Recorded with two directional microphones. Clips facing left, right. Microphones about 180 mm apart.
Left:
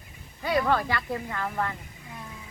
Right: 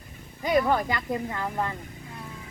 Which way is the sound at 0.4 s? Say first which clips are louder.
Right 2 dB; 15° right (ahead or behind).